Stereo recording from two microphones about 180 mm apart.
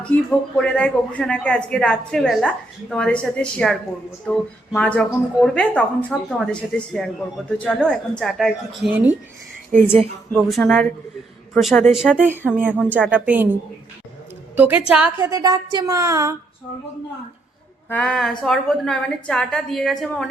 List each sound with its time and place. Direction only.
0.0 s speech: 5° left (ahead or behind)
8.9 s a woman's voice: 10° right (ahead or behind)
10.3 s speech: centre (ahead or behind)
12.3 s a woman's voice: 10° right (ahead or behind)
17.8 s speech: 5° left (ahead or behind)